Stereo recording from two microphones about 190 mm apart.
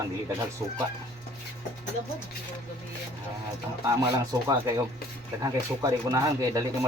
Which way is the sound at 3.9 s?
20° right (ahead or behind).